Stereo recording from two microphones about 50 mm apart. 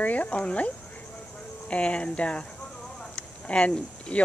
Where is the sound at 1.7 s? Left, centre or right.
Left.